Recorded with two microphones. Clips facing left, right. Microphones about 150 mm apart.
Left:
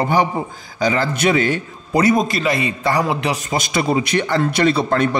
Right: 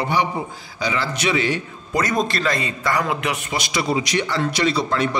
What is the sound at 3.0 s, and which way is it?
Speech, 30° left (ahead or behind).